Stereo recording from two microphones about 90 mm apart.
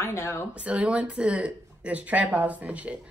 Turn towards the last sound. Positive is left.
turn(degrees=-15)  # may be behind; listen again after turning